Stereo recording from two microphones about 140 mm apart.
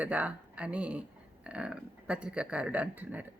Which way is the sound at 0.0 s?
10° right (ahead or behind).